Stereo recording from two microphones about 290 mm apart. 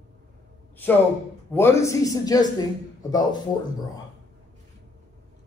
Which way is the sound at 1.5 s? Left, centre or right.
Centre.